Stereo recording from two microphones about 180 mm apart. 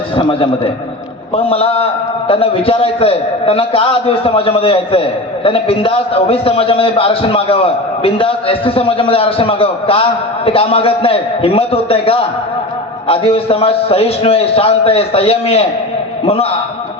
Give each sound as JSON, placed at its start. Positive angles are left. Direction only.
{"t": 0.2, "sound": "a man's voice", "side_deg": 30}